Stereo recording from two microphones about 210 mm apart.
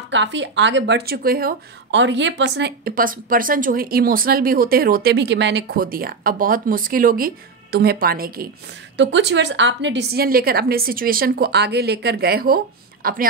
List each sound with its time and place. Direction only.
0.1 s speech: 60° right (ahead or behind); by 8.5 s 45° right (ahead or behind)
8.9 s speech: 60° right (ahead or behind); by 13.2 s 45° right (ahead or behind)